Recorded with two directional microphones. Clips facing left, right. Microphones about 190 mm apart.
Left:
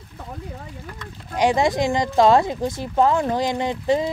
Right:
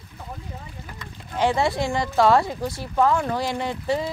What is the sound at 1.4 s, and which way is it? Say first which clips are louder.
Speech: left 3 dB; 15° left (ahead or behind).